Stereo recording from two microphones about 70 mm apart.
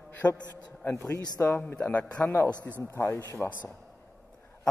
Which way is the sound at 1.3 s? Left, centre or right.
Left.